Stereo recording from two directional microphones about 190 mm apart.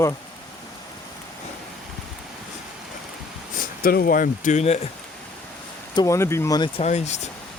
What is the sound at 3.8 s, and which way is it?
Speech, 50° left (ahead or behind).